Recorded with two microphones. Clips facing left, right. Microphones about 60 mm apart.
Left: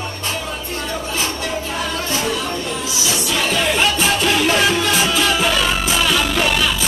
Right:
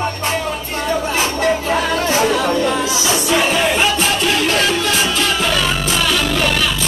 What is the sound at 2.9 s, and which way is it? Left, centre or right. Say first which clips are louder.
Music: right 5 dB; right.